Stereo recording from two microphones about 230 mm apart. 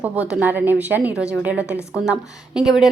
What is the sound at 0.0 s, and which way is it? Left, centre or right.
Speech, centre.